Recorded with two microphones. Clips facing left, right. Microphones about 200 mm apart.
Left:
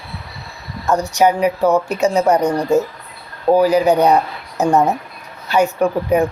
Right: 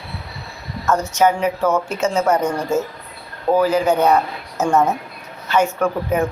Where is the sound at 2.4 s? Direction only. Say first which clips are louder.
Left 4 dB; 35° left (ahead or behind).